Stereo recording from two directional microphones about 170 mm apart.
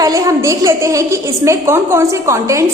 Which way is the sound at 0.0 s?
20° right (ahead or behind).